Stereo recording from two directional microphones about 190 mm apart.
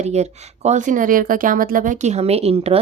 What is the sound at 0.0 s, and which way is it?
Speech, 35° right (ahead or behind).